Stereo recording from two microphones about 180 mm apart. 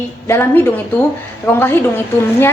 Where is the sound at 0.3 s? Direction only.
15° left (ahead or behind).